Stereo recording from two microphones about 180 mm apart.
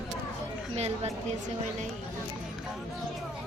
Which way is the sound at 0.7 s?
35° right (ahead or behind).